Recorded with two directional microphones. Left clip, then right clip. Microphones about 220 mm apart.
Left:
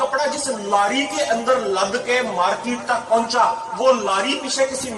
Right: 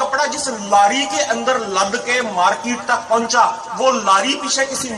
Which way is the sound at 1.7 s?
45° right (ahead or behind).